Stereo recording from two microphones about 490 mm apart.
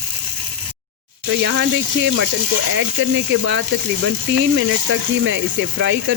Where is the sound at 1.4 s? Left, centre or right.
Right.